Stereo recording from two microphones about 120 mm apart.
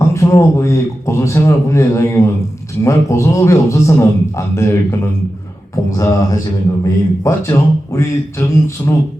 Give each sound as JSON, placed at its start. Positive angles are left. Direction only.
{"t": 0.0, "sound": "a man's voice", "side_deg": 25}